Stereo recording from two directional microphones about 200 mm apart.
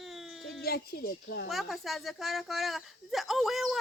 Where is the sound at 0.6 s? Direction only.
50° left (ahead or behind).